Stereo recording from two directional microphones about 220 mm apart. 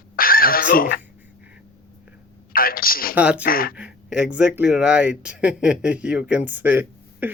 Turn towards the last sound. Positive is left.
turn(degrees=-10)  # may be behind; listen again after turning